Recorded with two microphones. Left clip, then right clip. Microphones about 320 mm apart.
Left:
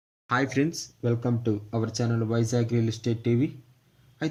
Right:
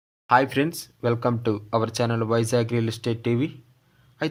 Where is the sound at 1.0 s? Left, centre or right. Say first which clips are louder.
Right 5 dB; right.